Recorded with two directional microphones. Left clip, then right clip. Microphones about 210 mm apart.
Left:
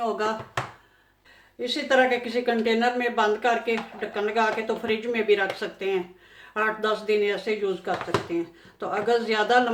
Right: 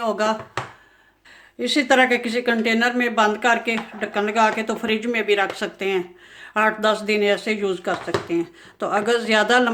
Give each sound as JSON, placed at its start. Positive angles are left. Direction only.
{"t": 0.0, "sound": "speech", "side_deg": -45}
{"t": 1.5, "sound": "speech", "side_deg": -50}